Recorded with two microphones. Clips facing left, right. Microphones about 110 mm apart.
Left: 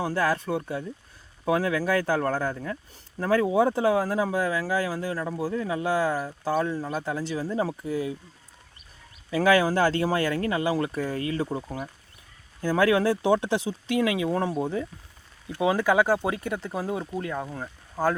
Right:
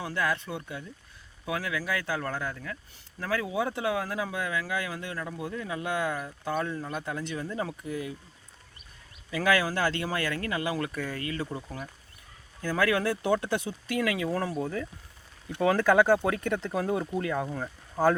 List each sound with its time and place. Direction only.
0.0 s speech: 35° left (ahead or behind)
9.3 s speech: 30° left (ahead or behind); by 18.1 s centre (ahead or behind)